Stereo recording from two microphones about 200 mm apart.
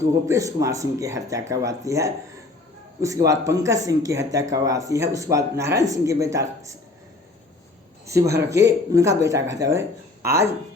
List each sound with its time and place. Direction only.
0.3 s speech: 15° right (ahead or behind)
8.0 s speech: 15° right (ahead or behind)